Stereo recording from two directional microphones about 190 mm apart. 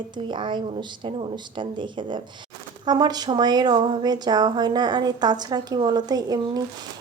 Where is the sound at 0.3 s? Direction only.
25° right (ahead or behind).